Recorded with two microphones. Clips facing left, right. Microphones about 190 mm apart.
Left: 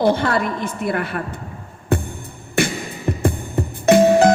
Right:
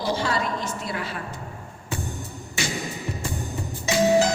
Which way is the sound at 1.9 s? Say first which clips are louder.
Left 10 dB; 55° left (ahead or behind).